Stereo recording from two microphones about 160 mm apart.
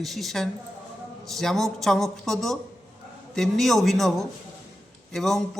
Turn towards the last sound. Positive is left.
turn(degrees=0)  # may be behind; listen again after turning